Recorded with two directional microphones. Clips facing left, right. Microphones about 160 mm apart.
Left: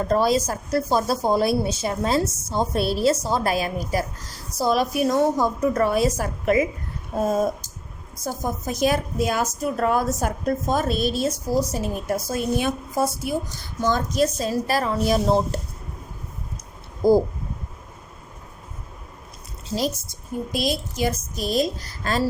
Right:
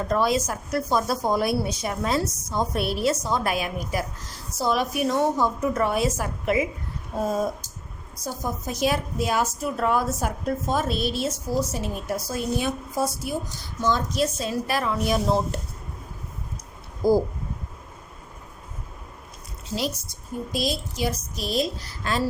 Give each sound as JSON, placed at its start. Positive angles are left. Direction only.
{"t": 0.1, "sound": "a woman's voice", "side_deg": 35}
{"t": 8.1, "sound": "a woman's voice", "side_deg": 50}
{"t": 13.8, "sound": "a woman's voice", "side_deg": 50}
{"t": 17.0, "sound": "speech", "side_deg": 25}
{"t": 19.7, "sound": "a woman's voice", "side_deg": 45}
{"t": 20.5, "sound": "a woman's voice", "side_deg": 55}